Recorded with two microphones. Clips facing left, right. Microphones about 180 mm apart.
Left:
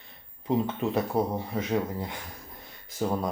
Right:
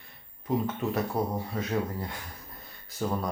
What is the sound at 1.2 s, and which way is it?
Speech, 25° left (ahead or behind).